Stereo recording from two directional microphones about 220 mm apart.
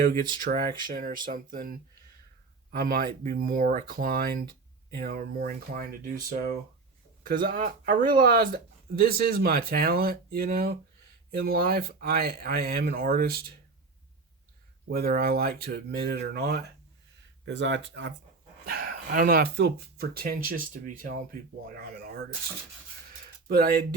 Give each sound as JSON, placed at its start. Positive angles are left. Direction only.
{"t": 0.0, "sound": "speech", "side_deg": -40}
{"t": 14.8, "sound": "speech", "side_deg": -45}
{"t": 18.6, "sound": "speech", "side_deg": -45}
{"t": 23.5, "sound": "speech", "side_deg": -40}